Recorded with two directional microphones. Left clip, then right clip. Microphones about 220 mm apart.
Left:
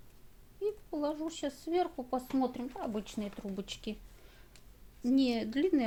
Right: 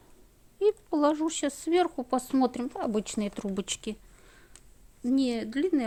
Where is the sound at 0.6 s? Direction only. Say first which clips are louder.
Right 10 dB; 45° right (ahead or behind); by 4.4 s 25° right (ahead or behind).